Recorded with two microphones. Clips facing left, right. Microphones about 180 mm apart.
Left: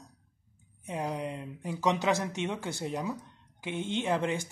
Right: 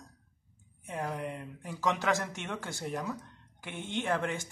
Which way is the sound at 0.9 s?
15° left (ahead or behind).